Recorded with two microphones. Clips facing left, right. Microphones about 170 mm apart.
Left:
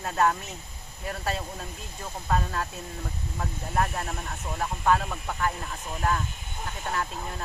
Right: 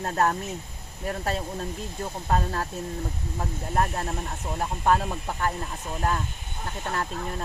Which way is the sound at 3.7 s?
35° right (ahead or behind).